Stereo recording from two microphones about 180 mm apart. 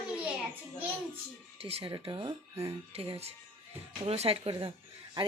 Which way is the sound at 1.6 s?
35° right (ahead or behind).